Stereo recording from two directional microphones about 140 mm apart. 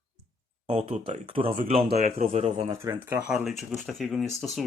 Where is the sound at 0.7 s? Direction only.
50° right (ahead or behind).